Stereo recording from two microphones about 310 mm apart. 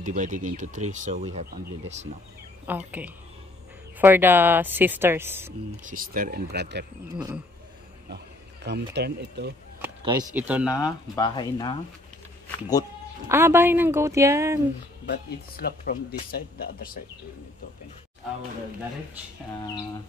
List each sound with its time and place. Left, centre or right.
0.0 s speech: right
2.7 s speech: centre
4.0 s speech: centre
5.9 s speech: right
8.6 s speech: right
9.8 s speech: centre
10.7 s speech: centre
13.3 s speech: centre
15.0 s speech: left
19.6 s speech: centre